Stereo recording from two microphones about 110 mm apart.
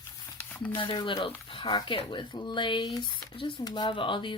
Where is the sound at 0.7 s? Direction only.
50° left (ahead or behind).